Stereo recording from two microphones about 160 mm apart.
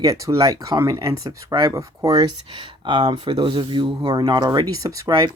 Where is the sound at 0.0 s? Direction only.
20° right (ahead or behind).